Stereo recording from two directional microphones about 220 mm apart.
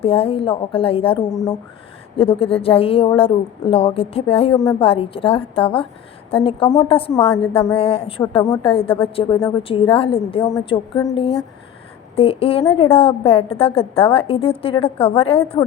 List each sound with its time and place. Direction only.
0.0 s a woman's voice: 25° left (ahead or behind)
12.1 s a woman's voice: 25° left (ahead or behind)